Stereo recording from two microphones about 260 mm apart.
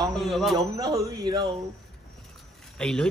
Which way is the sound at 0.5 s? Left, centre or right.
Centre.